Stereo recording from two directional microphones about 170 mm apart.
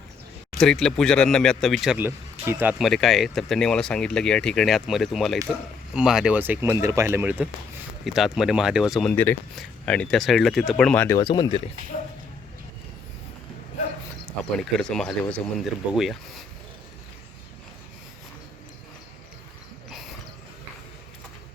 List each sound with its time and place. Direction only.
0.6 s speech: 5° left (ahead or behind)
2.4 s speech: 15° right (ahead or behind)
8.0 s speech: centre (ahead or behind)
9.1 s speech: 10° left (ahead or behind)
11.2 s speech: 25° left (ahead or behind)
14.6 s speech: 5° left (ahead or behind)